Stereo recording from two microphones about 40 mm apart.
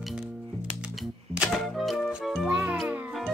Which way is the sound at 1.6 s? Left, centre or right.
Centre.